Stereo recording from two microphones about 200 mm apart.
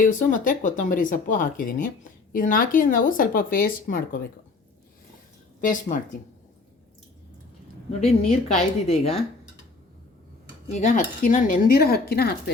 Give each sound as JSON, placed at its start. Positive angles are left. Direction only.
{"t": 0.0, "sound": "speech", "side_deg": 40}
{"t": 5.5, "sound": "speech", "side_deg": 40}
{"t": 8.0, "sound": "speech", "side_deg": 30}
{"t": 10.8, "sound": "speech", "side_deg": 40}